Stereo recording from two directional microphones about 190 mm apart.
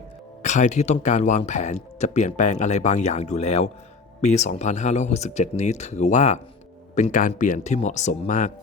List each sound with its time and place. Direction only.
0.4 s speech: 40° left (ahead or behind)